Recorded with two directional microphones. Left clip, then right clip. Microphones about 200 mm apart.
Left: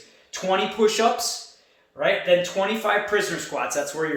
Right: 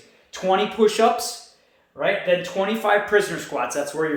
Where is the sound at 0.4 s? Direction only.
25° right (ahead or behind).